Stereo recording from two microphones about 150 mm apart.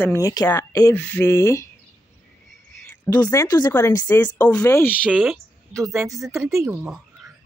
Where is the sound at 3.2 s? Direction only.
25° left (ahead or behind).